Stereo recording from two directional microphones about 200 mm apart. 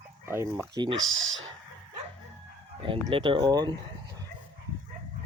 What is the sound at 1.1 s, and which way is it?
Speech, 80° right.